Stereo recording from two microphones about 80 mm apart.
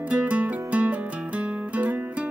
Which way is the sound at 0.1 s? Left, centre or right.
Centre.